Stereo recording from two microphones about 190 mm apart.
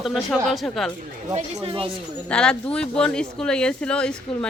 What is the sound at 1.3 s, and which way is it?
Speech, 35° right (ahead or behind).